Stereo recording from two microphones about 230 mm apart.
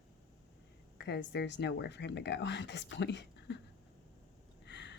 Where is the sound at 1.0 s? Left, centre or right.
Left.